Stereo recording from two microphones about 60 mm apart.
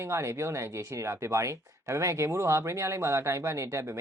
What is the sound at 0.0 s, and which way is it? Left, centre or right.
Speech, right.